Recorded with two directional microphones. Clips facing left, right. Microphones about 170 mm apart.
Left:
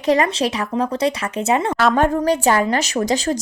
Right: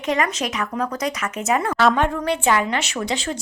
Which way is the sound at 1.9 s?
40° left (ahead or behind).